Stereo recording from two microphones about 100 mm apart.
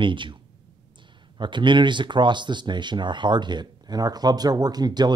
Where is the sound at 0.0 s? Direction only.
55° right (ahead or behind).